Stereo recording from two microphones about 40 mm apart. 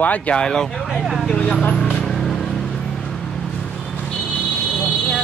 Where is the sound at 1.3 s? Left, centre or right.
Left.